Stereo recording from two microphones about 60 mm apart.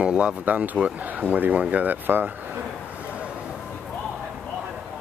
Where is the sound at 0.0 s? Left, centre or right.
Centre; by 2.3 s right.